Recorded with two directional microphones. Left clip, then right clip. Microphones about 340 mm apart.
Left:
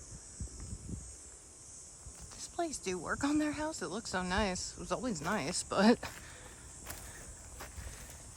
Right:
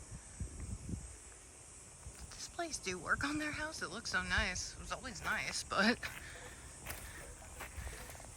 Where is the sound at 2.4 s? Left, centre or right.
Centre.